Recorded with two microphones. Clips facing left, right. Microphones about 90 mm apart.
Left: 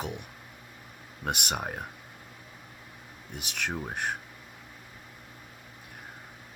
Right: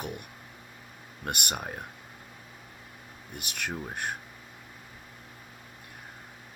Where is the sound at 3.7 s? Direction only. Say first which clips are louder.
Left 1 dB; 20° left (ahead or behind).